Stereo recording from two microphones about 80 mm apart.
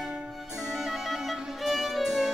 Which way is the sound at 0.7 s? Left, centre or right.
Centre.